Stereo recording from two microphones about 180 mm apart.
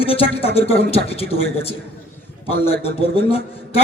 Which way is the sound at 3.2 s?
35° left (ahead or behind).